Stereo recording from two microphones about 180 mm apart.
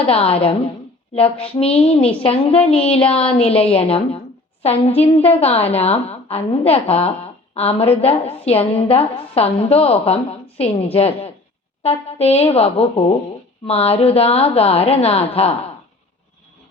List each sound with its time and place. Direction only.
0.0 s a woman's voice: 35° left (ahead or behind)
1.5 s a woman's voice: 30° left (ahead or behind)